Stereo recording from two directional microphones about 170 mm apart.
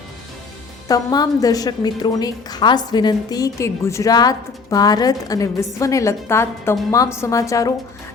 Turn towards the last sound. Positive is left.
turn(degrees=20)  # may be behind; listen again after turning